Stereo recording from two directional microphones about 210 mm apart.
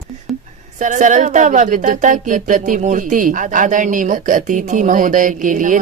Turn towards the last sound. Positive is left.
turn(degrees=-40)  # may be behind; listen again after turning